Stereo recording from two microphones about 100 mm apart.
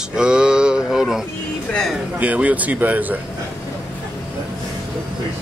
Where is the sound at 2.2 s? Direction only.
15° right (ahead or behind).